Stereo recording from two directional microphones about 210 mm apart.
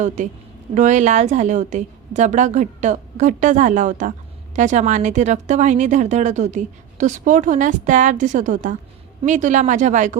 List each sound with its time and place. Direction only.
0.7 s speech: 35° right (ahead or behind)